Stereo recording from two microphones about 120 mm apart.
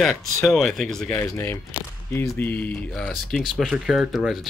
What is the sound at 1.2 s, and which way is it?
Speech, 20° left (ahead or behind).